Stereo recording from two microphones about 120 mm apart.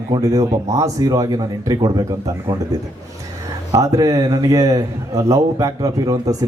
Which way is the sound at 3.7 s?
30° right (ahead or behind).